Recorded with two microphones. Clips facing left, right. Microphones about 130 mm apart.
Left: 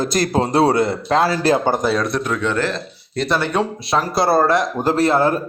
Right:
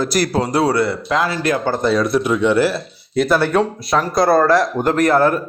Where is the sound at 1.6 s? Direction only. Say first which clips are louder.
Left 1 dB; 20° left (ahead or behind).